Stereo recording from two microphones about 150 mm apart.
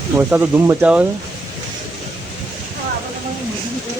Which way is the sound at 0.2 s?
15° right (ahead or behind).